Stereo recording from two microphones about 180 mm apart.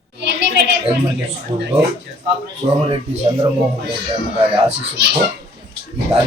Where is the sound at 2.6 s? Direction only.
40° right (ahead or behind).